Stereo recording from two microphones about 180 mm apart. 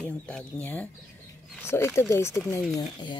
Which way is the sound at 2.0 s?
15° left (ahead or behind).